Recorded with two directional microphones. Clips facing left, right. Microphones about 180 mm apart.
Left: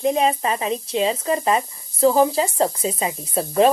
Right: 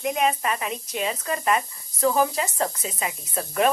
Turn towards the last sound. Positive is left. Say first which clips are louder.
# left 7 dB
turn(degrees=30)  # may be behind; listen again after turning